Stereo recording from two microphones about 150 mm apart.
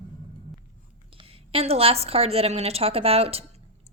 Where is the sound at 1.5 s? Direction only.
40° right (ahead or behind).